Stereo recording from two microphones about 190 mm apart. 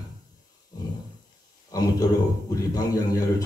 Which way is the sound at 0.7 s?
20° left (ahead or behind).